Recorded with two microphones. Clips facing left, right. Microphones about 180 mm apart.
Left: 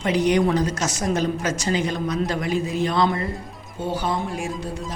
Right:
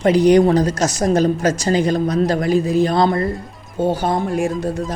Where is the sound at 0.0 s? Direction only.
40° right (ahead or behind).